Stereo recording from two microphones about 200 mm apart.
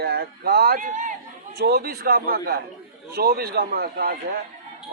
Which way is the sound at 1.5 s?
50° right (ahead or behind).